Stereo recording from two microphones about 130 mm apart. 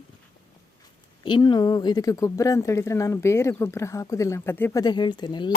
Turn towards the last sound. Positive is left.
turn(degrees=35)  # may be behind; listen again after turning